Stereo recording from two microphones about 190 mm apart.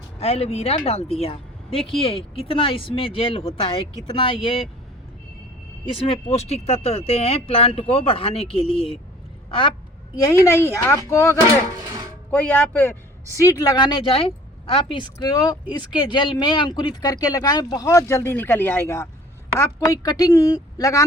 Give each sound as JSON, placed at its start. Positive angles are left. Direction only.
{"t": 0.2, "sound": "speech", "side_deg": 35}
{"t": 5.9, "sound": "speech", "side_deg": 30}
{"t": 10.4, "sound": "speech", "side_deg": 15}